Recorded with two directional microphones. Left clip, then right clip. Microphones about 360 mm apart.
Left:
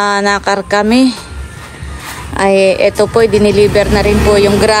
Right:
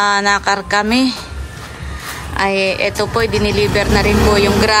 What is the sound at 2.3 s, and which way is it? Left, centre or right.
Speech, centre.